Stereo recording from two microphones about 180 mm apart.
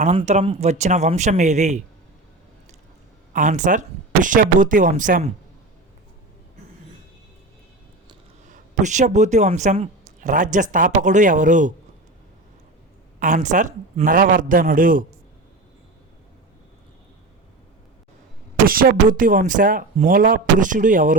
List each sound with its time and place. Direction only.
0.0 s speech: 35° right (ahead or behind)
3.3 s a woman's voice: 45° right (ahead or behind)
8.4 s a woman's voice: 45° right (ahead or behind)
13.1 s a woman's voice: 45° right (ahead or behind)
18.6 s a woman's voice: 55° right (ahead or behind)